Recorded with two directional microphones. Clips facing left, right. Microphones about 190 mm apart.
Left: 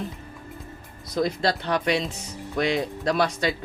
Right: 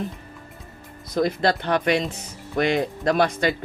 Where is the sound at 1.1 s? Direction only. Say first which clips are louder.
Right 3 dB; 55° right (ahead or behind).